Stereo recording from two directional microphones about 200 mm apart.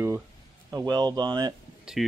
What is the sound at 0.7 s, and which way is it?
Speech, 20° right (ahead or behind).